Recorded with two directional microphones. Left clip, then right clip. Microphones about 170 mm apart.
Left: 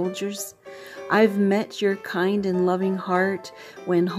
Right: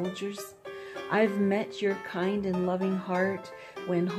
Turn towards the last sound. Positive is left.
turn(degrees=40)  # may be behind; listen again after turning